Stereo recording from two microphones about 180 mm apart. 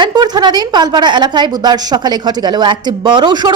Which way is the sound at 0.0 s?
25° right (ahead or behind).